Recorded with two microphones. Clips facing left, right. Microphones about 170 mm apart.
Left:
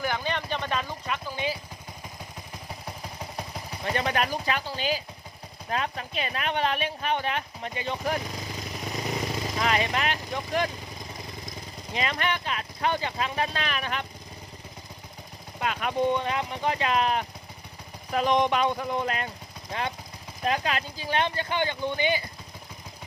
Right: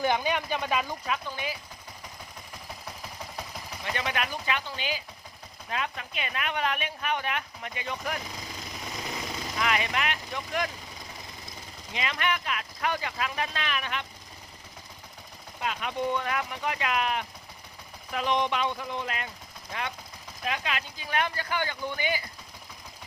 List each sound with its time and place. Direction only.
0.0 s speech: 15° right (ahead or behind)
3.8 s speech: 35° left (ahead or behind)
9.6 s speech: 35° left (ahead or behind)
11.9 s speech: 35° left (ahead or behind)
15.6 s speech: 50° left (ahead or behind)
16.0 s speech: 25° left (ahead or behind)